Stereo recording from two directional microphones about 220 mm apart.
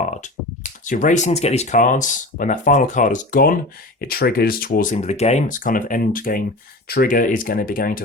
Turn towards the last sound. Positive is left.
turn(degrees=40)  # may be behind; listen again after turning